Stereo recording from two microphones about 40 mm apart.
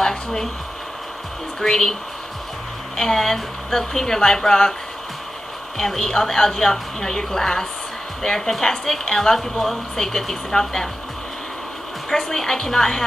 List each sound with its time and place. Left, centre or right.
0.0 s a sound: centre
1.6 s a woman's voice: centre
3.0 s a woman's voice: centre
5.8 s a woman's voice: centre
12.1 s a woman's voice: centre